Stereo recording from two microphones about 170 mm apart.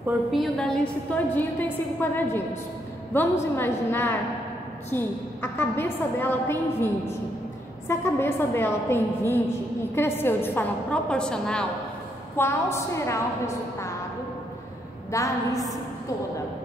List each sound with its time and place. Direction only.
0.0 s a woman's voice: centre (ahead or behind)
12.4 s a woman's voice: 15° left (ahead or behind)
15.0 s a woman's voice: 20° left (ahead or behind)